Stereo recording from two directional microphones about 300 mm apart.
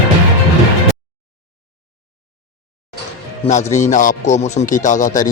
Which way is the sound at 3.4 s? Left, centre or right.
Left.